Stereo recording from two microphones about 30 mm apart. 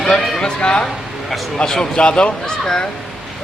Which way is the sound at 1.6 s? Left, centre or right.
Left.